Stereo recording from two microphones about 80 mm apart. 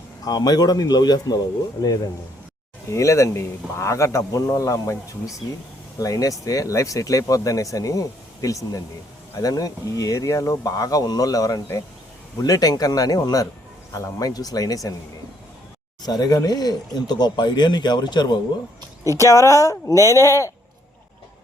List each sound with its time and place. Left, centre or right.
0.3 s speech: left
2.9 s speech: left
16.0 s speech: left
19.0 s speech: left